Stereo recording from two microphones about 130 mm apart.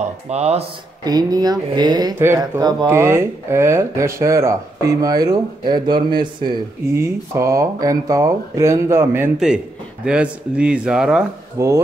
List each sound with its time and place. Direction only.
0.3 s speech: 55° right (ahead or behind)
1.0 s speech: 30° right (ahead or behind)
2.1 s speech: 20° right (ahead or behind); by 6.5 s 35° right (ahead or behind)
7.0 s speech: 25° right (ahead or behind)
10.0 s a man's voice: 10° right (ahead or behind)
11.5 s speech: 25° right (ahead or behind)